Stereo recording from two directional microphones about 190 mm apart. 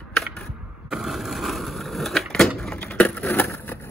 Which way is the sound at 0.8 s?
Centre (ahead or behind).